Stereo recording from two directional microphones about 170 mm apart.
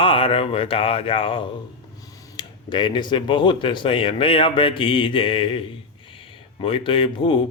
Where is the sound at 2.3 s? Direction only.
25° left (ahead or behind).